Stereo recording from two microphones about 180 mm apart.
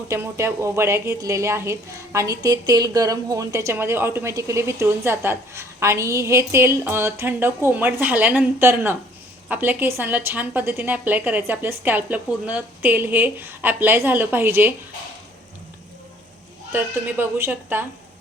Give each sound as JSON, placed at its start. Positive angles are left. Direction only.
{"t": 0.1, "sound": "a woman's voice", "side_deg": -15}
{"t": 16.7, "sound": "a woman's voice", "side_deg": -10}